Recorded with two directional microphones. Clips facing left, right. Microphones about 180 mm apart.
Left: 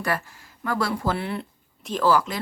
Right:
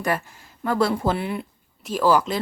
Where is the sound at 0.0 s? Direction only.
20° right (ahead or behind).